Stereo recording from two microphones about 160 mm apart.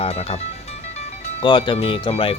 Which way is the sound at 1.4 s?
30° left (ahead or behind).